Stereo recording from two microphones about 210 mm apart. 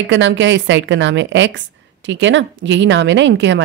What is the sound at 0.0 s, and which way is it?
Speech, 60° right (ahead or behind).